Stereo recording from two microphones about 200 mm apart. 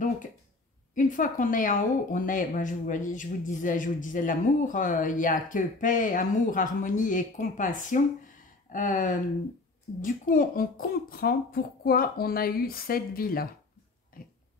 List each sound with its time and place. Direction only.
0.9 s a woman's voice: 40° left (ahead or behind)